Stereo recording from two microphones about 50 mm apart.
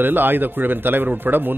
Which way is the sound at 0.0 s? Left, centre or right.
Right.